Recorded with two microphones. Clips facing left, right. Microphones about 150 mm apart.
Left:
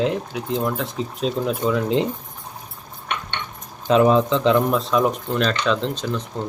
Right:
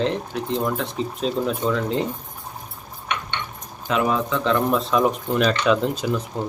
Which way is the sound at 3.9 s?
30° left (ahead or behind).